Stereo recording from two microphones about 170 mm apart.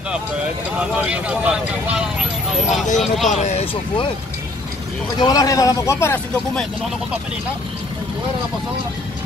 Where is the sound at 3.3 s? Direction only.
40° left (ahead or behind).